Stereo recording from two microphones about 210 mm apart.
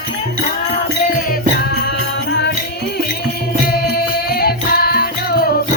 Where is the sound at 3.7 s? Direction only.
50° left (ahead or behind).